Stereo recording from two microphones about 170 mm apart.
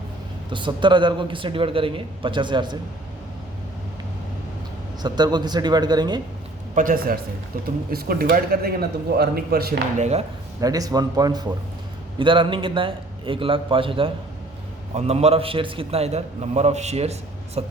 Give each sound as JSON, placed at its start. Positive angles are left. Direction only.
{"t": 0.5, "sound": "a man's voice", "side_deg": -30}
{"t": 5.0, "sound": "a man's voice", "side_deg": -25}
{"t": 6.7, "sound": "a man's voice", "side_deg": -55}
{"t": 10.0, "sound": "a man's voice", "side_deg": -40}
{"t": 10.6, "sound": "a man's voice", "side_deg": -20}